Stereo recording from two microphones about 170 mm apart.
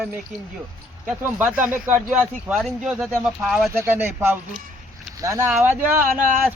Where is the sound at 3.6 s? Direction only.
15° right (ahead or behind).